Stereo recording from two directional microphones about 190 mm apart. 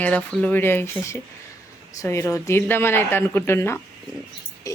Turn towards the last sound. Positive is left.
turn(degrees=15)  # may be behind; listen again after turning